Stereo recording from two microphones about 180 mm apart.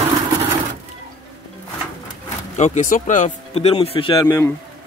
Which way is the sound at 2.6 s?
45° left (ahead or behind).